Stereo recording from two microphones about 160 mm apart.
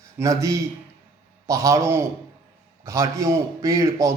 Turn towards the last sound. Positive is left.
turn(degrees=-20)  # may be behind; listen again after turning